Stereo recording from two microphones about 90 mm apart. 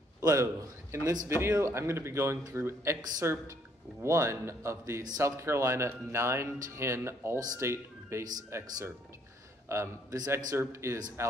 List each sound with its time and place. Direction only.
0.2 s a man's voice: 35° right (ahead or behind)